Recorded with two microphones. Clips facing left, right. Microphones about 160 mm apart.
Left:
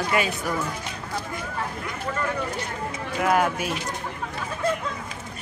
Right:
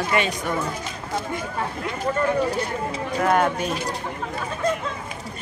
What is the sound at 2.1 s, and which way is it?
Speech, 40° right (ahead or behind).